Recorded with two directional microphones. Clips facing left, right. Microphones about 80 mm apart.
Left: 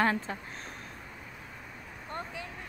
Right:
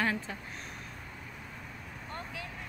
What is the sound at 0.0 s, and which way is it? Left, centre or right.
Speech, left.